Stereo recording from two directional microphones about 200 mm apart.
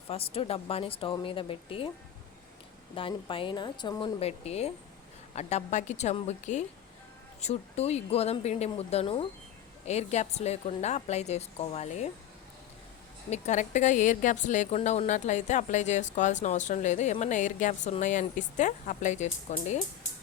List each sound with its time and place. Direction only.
0.1 s a woman's voice: 30° left (ahead or behind)
2.9 s a woman's voice: 25° left (ahead or behind)
13.3 s speech: 35° left (ahead or behind)